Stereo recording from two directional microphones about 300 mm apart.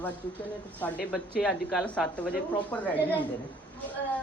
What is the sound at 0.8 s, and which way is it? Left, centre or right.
Speech, centre.